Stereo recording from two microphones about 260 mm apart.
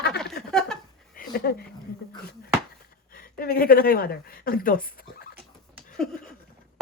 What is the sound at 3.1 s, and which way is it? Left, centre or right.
Speech, left.